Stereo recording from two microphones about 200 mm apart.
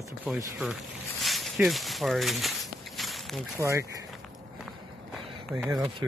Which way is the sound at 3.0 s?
Centre (ahead or behind).